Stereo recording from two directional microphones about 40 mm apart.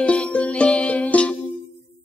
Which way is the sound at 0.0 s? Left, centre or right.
Left.